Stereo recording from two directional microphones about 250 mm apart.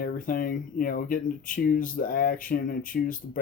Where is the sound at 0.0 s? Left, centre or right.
Left.